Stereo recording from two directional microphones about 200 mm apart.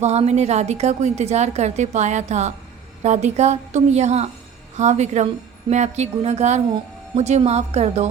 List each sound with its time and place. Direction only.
0.0 s a woman's voice: 35° right (ahead or behind)